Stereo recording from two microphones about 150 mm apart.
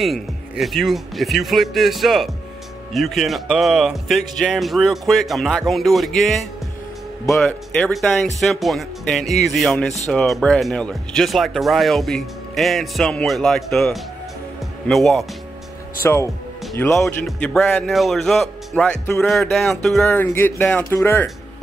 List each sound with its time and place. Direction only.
0.0 s speech: centre (ahead or behind)
7.9 s speech: 5° left (ahead or behind)
16.0 s speech: 15° left (ahead or behind)
16.9 s speech: 5° left (ahead or behind)